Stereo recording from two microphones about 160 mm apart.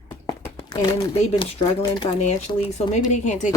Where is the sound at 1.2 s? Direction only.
35° left (ahead or behind).